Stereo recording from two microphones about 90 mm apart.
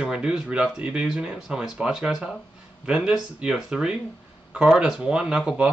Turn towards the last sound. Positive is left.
turn(degrees=-10)  # may be behind; listen again after turning